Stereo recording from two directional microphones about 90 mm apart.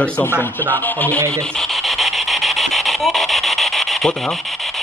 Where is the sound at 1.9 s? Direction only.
Centre (ahead or behind).